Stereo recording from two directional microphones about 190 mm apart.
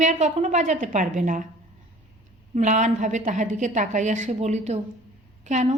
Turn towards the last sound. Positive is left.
turn(degrees=-40)  # may be behind; listen again after turning